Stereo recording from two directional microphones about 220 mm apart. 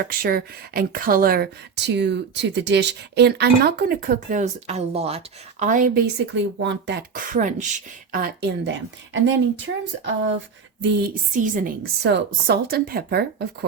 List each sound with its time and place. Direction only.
0.0 s speech: 40° right (ahead or behind)
8.1 s speech: 45° right (ahead or behind)
11.3 s a woman's voice: 35° right (ahead or behind)
12.0 s speech: 50° right (ahead or behind)